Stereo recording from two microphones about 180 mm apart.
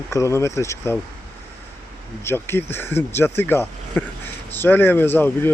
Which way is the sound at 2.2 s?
10° left (ahead or behind).